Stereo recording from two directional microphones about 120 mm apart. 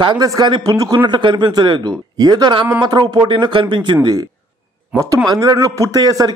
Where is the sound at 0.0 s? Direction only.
35° right (ahead or behind).